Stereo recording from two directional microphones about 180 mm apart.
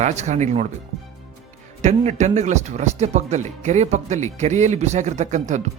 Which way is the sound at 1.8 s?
40° right (ahead or behind).